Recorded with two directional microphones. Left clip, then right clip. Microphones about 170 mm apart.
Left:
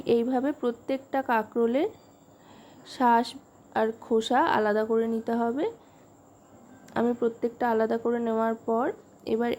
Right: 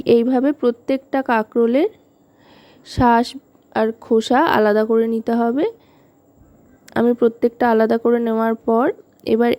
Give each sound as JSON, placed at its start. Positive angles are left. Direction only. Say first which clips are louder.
{"t": 0.0, "sound": "a woman's voice", "louder": "right 10 dB", "side_deg": -45}
{"t": 6.8, "sound": "speech", "louder": "right 10 dB", "side_deg": -45}